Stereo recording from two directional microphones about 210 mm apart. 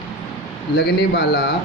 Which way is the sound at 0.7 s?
55° left (ahead or behind).